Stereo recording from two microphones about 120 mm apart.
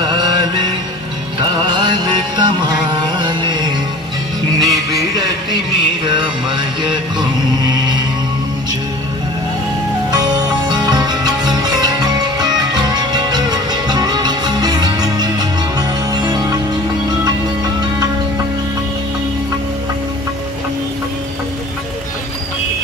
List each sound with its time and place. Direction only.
0.0 s music: 35° right (ahead or behind)
10.1 s music: 35° right (ahead or behind)